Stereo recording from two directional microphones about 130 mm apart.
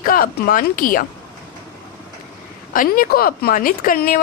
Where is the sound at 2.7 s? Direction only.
90° left.